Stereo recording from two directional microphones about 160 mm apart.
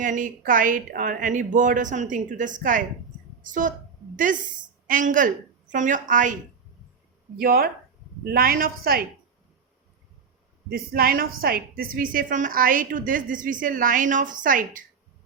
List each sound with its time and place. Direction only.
0.0 s a woman's voice: 55° right (ahead or behind)
4.9 s a woman's voice: 55° right (ahead or behind)
7.3 s a woman's voice: 70° right (ahead or behind)
10.7 s a woman's voice: 70° right (ahead or behind)